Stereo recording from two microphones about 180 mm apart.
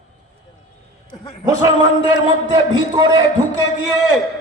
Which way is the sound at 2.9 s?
25° right (ahead or behind).